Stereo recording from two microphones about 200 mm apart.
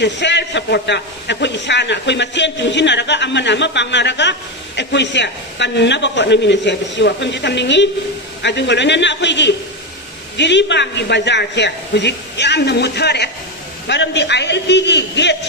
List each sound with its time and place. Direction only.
0.0 s a man's voice: 60° left (ahead or behind)